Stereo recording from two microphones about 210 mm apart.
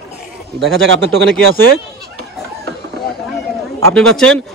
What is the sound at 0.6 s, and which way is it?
Speech, 60° right (ahead or behind).